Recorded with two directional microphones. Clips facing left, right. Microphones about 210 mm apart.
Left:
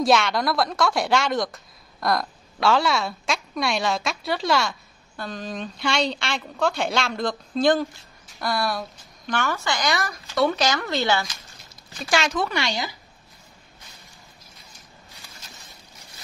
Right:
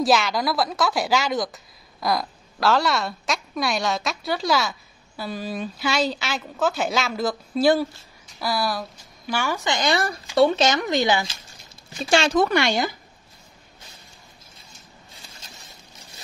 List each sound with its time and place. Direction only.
0.0 s a woman's voice: centre (ahead or behind)
9.8 s speech: 30° right (ahead or behind)
12.0 s speech: 30° right (ahead or behind)
12.4 s speech: 50° right (ahead or behind)